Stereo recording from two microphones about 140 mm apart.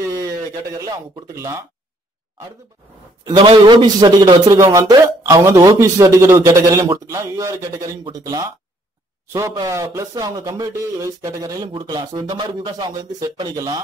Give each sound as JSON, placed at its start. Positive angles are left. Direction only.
{"t": 0.7, "sound": "a man's voice", "side_deg": -25}
{"t": 3.3, "sound": "a man's voice", "side_deg": -35}